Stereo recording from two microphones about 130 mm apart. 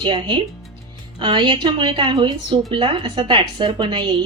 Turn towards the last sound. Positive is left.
turn(degrees=-35)  # may be behind; listen again after turning